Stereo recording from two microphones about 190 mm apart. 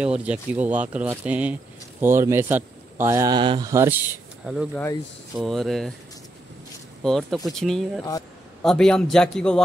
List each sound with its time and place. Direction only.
0.0 s speech: 5° right (ahead or behind)
7.0 s speech: centre (ahead or behind)